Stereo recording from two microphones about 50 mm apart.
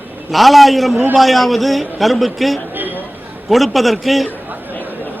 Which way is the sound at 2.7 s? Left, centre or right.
Right.